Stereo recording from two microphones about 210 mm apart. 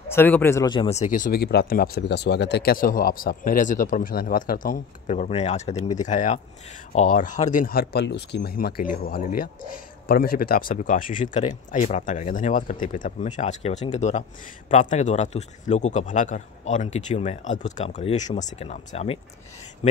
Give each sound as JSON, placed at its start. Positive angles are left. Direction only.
{"t": 0.1, "sound": "speech", "side_deg": 10}